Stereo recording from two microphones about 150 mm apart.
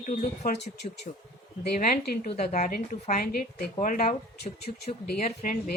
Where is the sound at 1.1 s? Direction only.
50° left (ahead or behind).